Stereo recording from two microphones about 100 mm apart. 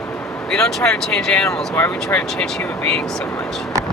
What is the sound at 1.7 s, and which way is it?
Speech, 20° left (ahead or behind).